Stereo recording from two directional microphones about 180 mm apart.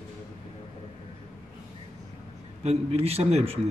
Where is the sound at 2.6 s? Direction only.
35° right (ahead or behind).